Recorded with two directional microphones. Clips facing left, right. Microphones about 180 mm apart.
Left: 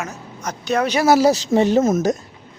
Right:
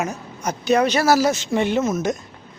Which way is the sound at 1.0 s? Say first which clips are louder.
Left 3 dB; 25° left (ahead or behind).